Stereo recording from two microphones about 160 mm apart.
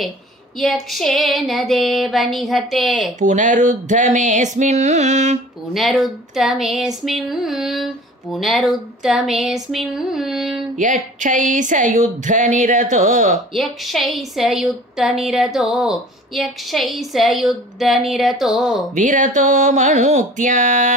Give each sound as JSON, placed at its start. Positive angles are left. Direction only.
{"t": 0.6, "sound": "a woman's voice", "side_deg": 0}
{"t": 3.2, "sound": "a woman's voice", "side_deg": -50}
{"t": 5.7, "sound": "a woman's voice", "side_deg": 0}
{"t": 10.8, "sound": "a woman's voice", "side_deg": -55}
{"t": 13.5, "sound": "a woman's voice", "side_deg": 0}
{"t": 18.9, "sound": "a woman's voice", "side_deg": -55}